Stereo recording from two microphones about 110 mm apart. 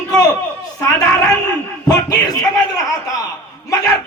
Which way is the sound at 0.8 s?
35° left (ahead or behind).